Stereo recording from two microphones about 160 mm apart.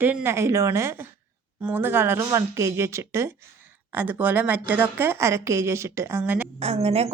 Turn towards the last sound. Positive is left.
turn(degrees=-40)  # may be behind; listen again after turning